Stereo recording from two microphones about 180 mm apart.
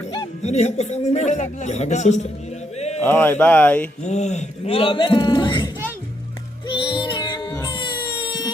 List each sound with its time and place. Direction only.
0.4 s a man's voice: 40° left (ahead or behind)
2.7 s a sound: 35° left (ahead or behind)
3.0 s speech: 10° left (ahead or behind)
4.0 s a man's voice: 40° left (ahead or behind)
6.7 s music: 25° left (ahead or behind)
7.6 s a sound: 25° left (ahead or behind)